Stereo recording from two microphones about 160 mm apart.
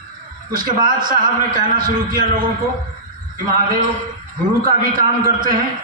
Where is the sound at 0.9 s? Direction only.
60° right (ahead or behind).